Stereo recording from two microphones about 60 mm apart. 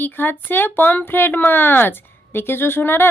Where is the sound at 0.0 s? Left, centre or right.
Left.